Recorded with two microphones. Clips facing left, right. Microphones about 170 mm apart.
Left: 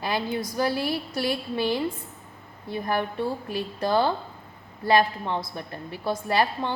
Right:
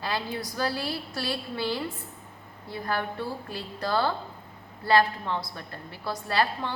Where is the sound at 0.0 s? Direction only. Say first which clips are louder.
Left 4 dB; 20° left (ahead or behind).